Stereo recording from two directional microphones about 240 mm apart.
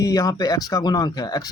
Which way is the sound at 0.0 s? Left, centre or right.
Centre.